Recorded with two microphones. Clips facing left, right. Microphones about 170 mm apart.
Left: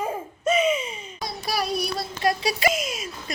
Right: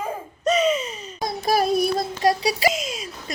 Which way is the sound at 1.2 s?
50° right (ahead or behind).